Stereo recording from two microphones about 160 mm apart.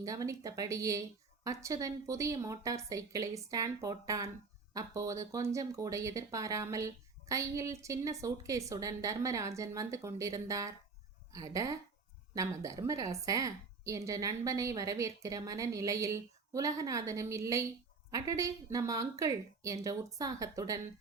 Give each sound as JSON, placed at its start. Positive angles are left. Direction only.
{"t": 0.0, "sound": "speech", "side_deg": -20}